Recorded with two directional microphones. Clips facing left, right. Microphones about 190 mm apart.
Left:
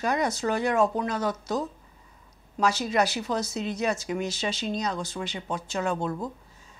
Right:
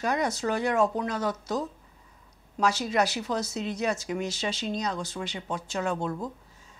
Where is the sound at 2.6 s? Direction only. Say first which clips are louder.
Left 1 dB; 15° left (ahead or behind); by 6.2 s 30° left (ahead or behind).